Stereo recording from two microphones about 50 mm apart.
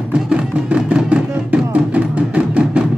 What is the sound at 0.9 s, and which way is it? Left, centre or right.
Music, right.